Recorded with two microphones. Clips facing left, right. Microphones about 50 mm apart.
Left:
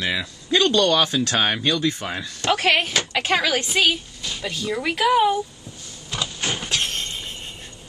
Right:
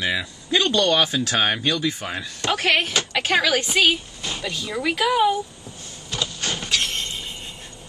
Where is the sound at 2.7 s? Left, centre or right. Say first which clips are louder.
Even; centre.